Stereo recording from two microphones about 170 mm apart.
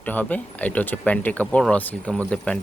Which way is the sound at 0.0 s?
10° left (ahead or behind).